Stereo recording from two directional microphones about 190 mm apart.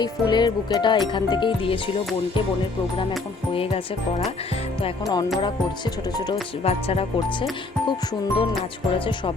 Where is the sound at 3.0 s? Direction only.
25° left (ahead or behind).